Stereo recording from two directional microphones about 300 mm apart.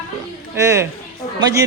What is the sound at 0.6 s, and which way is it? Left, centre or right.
Speech, centre.